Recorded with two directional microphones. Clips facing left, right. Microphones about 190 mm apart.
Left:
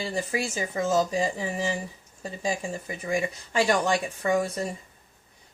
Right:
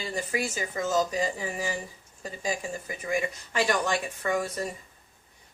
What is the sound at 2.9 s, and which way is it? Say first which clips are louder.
Speech: left 1 dB; 25° left (ahead or behind).